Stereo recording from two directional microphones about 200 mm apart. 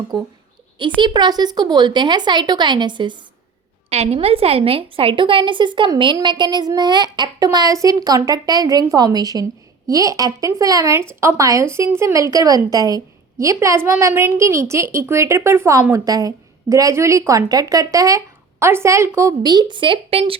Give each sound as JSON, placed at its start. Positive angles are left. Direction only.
{"t": 0.1, "sound": "a woman's voice", "side_deg": -20}